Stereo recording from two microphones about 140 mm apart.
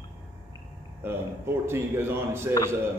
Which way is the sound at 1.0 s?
15° right (ahead or behind).